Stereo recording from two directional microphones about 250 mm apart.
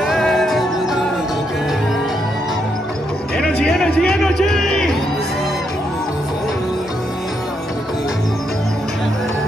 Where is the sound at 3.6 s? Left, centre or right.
Centre.